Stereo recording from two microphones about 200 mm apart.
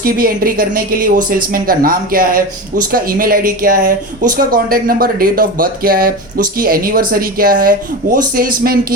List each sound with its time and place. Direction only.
0.0 s speech: 45° right (ahead or behind)